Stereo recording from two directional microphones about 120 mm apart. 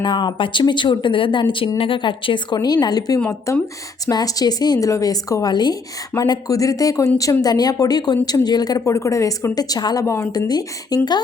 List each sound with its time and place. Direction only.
0.0 s speech: 40° left (ahead or behind)
3.2 s speech: 20° left (ahead or behind)